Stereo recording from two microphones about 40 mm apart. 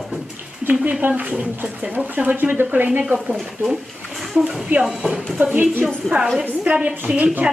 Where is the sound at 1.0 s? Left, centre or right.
Right.